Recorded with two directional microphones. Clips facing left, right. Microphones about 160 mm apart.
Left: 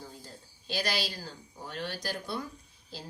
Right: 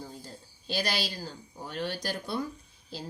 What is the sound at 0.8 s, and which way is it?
Speech, 25° right (ahead or behind).